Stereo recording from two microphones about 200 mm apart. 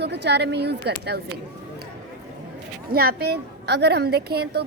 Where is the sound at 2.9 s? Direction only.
50° right (ahead or behind).